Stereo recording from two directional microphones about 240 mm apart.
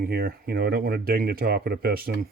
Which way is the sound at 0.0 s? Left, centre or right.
Right.